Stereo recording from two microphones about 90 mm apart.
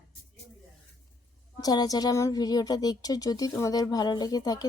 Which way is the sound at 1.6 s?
45° left (ahead or behind).